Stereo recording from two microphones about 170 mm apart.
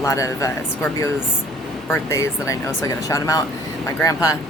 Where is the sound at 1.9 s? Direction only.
15° left (ahead or behind).